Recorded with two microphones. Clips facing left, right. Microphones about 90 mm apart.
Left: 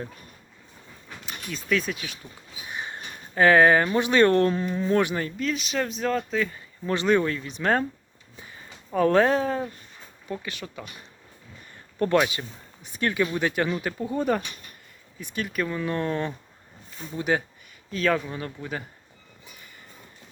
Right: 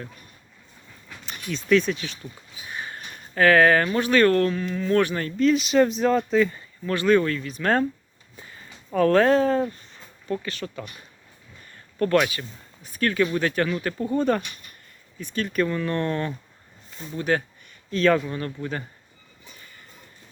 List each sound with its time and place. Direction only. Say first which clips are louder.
1.2 s speech: right 4 dB; 5° left (ahead or behind)
2.6 s speech: even; 20° left (ahead or behind); by 6.6 s centre (ahead or behind)
6.8 s speech: right 2 dB; 20° left (ahead or behind)
11.9 s speech: right 1 dB; 20° left (ahead or behind)